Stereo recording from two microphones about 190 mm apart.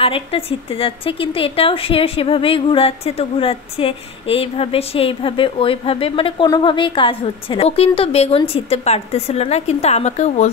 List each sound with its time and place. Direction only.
0.0 s speech: 30° left (ahead or behind)